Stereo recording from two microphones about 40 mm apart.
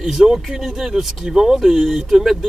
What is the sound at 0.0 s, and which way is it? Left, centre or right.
Speech, centre.